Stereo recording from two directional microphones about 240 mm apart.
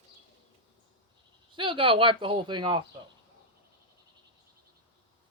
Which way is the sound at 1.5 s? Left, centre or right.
Centre.